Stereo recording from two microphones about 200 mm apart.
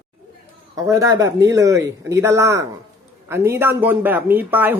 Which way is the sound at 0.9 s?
15° right (ahead or behind).